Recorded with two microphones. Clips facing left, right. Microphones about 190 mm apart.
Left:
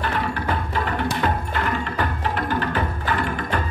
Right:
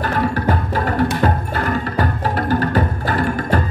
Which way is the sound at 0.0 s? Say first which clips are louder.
Right 6 dB; 40° right (ahead or behind).